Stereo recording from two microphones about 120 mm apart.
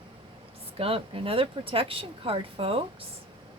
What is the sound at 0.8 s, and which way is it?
A woman's voice, 50° right (ahead or behind).